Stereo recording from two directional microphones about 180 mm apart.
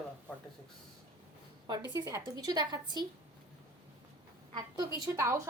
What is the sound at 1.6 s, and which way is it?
A woman's voice, 15° right (ahead or behind).